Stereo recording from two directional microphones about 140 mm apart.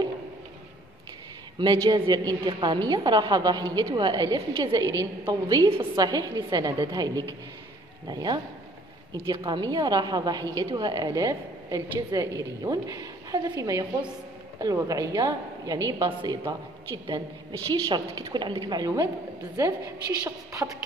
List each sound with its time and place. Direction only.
1.6 s a woman's voice: 30° right (ahead or behind)
20.2 s a woman's voice: 20° right (ahead or behind)